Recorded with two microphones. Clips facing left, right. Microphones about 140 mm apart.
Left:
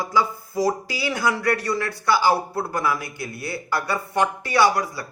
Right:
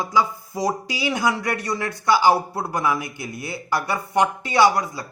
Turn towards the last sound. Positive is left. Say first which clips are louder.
# right 1 dB
turn(degrees=-20)  # may be behind; listen again after turning